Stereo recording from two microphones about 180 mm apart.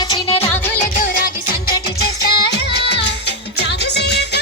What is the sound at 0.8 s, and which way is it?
Music, 50° left (ahead or behind).